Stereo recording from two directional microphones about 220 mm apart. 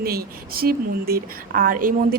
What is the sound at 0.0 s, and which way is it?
A woman's voice, 45° right (ahead or behind).